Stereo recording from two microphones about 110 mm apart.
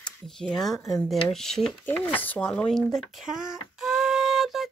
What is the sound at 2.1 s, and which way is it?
Speech, 15° left (ahead or behind).